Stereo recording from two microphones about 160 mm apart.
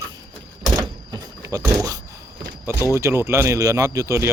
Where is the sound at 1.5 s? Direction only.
20° right (ahead or behind).